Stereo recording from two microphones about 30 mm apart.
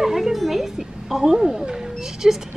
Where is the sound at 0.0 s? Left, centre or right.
Centre.